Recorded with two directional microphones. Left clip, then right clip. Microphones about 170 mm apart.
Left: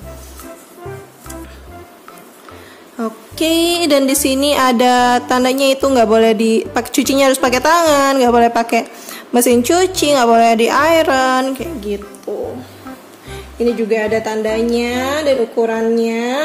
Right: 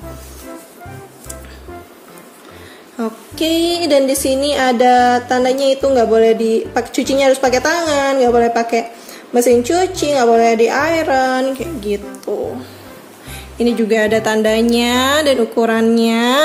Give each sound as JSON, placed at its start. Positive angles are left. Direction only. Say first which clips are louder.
{"t": 3.0, "sound": "a sound", "louder": "even", "side_deg": 5}
{"t": 3.3, "sound": "music", "louder": "left 2 dB", "side_deg": 25}
{"t": 12.3, "sound": "music", "louder": "right 2 dB", "side_deg": -20}
{"t": 13.3, "sound": "speech", "louder": "left 1 dB", "side_deg": -25}